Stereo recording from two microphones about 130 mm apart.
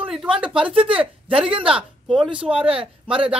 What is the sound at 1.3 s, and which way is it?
Speech, 45° right (ahead or behind).